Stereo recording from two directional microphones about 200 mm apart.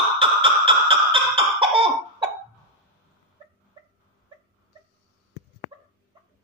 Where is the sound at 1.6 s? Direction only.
25° right (ahead or behind).